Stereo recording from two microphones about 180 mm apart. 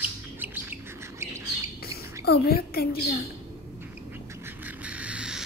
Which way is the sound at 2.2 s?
60° left (ahead or behind).